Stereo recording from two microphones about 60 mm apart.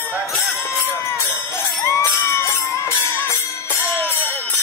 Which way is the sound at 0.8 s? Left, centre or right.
Left.